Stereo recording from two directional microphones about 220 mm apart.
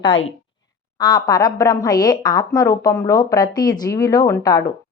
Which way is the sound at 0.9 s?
20° left (ahead or behind).